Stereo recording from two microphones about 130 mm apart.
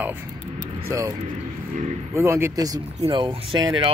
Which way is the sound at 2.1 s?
20° right (ahead or behind).